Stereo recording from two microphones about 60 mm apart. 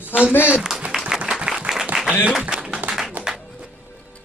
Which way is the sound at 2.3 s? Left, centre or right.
Centre.